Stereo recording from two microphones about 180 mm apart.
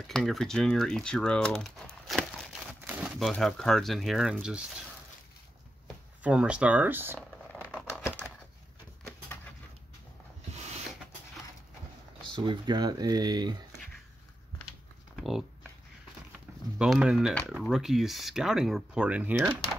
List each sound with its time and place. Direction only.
0.1 s speech: 5° left (ahead or behind)
6.2 s speech: 5° right (ahead or behind)
10.5 s a sound: 40° right (ahead or behind)
12.4 s speech: 25° right (ahead or behind)
15.1 s speech: centre (ahead or behind)
16.7 s speech: 5° right (ahead or behind)